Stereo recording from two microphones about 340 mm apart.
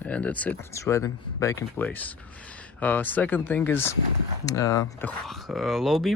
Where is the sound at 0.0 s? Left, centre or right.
Centre.